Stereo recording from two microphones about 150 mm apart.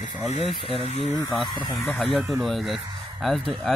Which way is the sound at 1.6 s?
30° left (ahead or behind).